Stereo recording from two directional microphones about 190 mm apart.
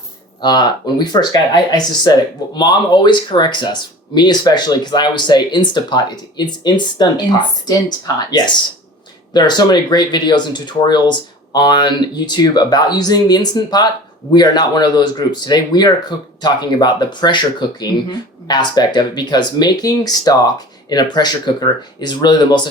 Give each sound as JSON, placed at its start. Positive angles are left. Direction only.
{"t": 0.4, "sound": "speech", "side_deg": 20}